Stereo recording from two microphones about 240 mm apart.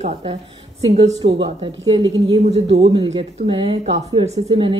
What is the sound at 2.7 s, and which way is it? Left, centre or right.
A woman's voice, right.